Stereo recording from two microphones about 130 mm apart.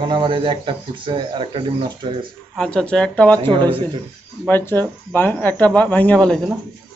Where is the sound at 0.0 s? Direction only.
40° right (ahead or behind).